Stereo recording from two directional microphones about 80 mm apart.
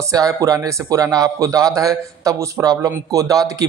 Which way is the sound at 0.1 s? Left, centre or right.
Right.